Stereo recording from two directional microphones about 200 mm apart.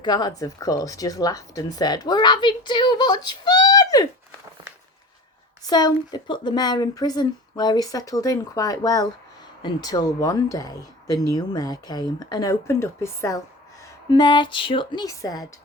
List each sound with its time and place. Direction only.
0.0 s speech: 20° left (ahead or behind)
5.6 s speech: 20° left (ahead or behind)